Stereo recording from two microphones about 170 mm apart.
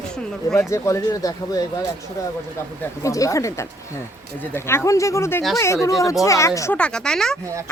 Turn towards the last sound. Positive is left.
turn(degrees=5)  # may be behind; listen again after turning